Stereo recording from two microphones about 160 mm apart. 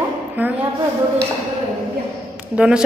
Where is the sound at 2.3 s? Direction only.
5° right (ahead or behind).